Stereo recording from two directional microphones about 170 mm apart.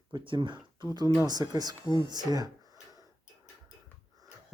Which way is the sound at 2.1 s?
25° right (ahead or behind).